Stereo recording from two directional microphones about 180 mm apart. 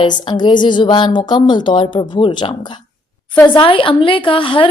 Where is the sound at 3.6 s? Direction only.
30° left (ahead or behind).